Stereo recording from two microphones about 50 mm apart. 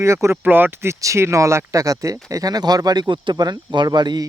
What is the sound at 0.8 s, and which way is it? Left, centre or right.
Speech, right.